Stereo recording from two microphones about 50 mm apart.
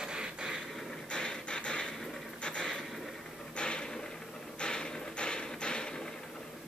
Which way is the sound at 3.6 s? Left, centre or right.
Centre.